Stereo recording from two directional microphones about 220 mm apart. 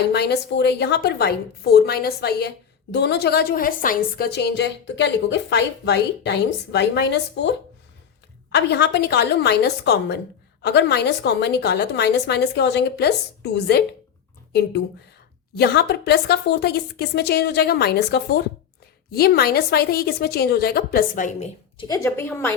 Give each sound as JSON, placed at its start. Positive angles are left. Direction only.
{"t": 0.1, "sound": "a woman's voice", "side_deg": 50}
{"t": 8.5, "sound": "a woman's voice", "side_deg": 50}
{"t": 21.8, "sound": "a woman's voice", "side_deg": 15}